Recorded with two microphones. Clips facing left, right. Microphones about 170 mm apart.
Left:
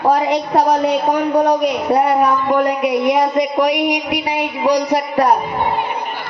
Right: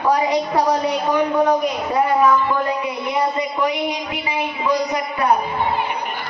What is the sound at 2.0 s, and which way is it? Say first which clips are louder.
Speech: right 2 dB; 60° left (ahead or behind).